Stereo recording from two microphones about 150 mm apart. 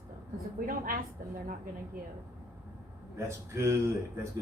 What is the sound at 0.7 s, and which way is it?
Speech, 70° right (ahead or behind).